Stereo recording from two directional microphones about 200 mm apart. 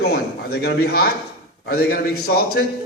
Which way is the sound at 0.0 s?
55° left (ahead or behind).